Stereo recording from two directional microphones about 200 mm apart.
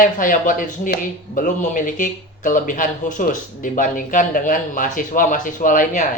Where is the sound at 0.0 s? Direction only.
40° left (ahead or behind).